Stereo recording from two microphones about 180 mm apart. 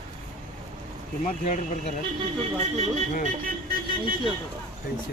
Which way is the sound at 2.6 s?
40° right (ahead or behind).